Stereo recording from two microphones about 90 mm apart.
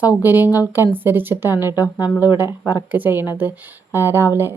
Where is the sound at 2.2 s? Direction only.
25° right (ahead or behind).